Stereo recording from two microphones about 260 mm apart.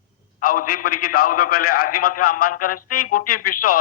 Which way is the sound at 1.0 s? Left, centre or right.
Left.